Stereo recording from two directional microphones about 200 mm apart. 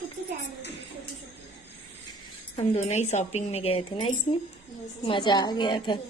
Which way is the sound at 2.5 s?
35° left (ahead or behind).